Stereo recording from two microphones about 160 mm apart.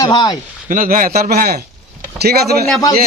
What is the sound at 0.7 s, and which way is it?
A man's voice, 60° right (ahead or behind).